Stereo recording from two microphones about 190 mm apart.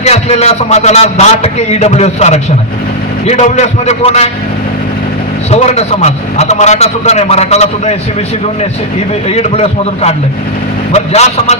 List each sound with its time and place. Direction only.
0.0 s a man's voice: 35° left (ahead or behind)
5.5 s a man's voice: 35° left (ahead or behind)
9.3 s a man's voice: 35° left (ahead or behind)